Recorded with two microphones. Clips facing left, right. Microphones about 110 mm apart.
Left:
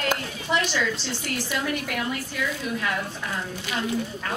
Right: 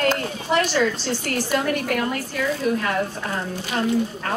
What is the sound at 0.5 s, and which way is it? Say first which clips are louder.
A man's voice: right 5 dB; 45° right (ahead or behind).